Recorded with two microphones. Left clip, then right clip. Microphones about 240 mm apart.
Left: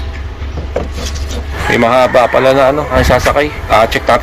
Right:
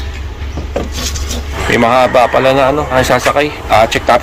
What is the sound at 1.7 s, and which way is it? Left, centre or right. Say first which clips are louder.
A man's voice: even; centre.